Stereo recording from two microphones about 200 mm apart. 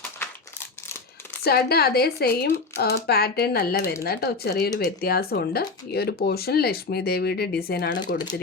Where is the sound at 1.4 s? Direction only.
50° left (ahead or behind).